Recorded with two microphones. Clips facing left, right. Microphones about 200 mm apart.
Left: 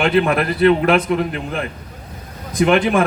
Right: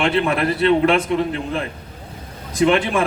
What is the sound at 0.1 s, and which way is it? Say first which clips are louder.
A man's voice: left 2 dB; 30° right (ahead or behind).